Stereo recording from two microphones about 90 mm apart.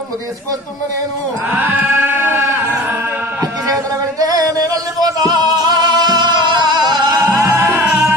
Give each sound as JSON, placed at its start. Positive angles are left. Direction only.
{"t": 1.5, "sound": "music", "side_deg": -20}
{"t": 4.2, "sound": "music", "side_deg": -45}
{"t": 7.3, "sound": "music", "side_deg": -20}